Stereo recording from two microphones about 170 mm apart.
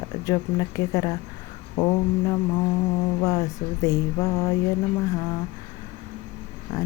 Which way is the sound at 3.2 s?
20° left (ahead or behind).